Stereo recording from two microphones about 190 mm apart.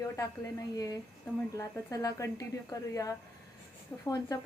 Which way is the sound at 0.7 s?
20° left (ahead or behind).